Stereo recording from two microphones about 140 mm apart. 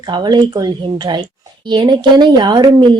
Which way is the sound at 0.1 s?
30° right (ahead or behind).